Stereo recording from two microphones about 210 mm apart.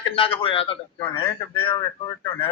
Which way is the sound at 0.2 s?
25° left (ahead or behind).